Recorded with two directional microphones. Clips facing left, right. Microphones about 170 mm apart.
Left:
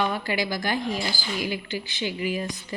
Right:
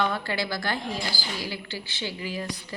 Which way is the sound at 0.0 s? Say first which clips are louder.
Left 1 dB; 15° left (ahead or behind).